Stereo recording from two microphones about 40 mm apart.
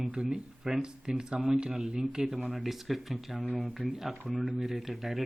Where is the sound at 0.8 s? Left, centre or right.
Centre.